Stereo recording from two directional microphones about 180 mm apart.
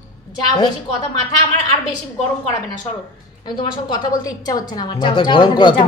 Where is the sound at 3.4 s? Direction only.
25° left (ahead or behind).